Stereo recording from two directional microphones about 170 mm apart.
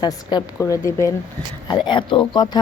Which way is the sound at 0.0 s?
25° left (ahead or behind).